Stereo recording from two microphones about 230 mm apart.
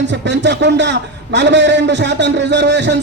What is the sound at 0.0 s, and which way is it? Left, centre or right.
A man's voice, right.